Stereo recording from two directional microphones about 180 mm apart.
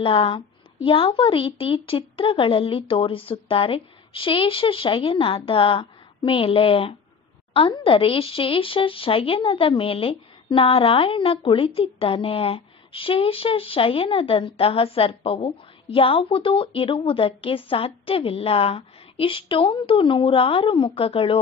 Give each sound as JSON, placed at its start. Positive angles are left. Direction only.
{"t": 0.0, "sound": "a woman's voice", "side_deg": 30}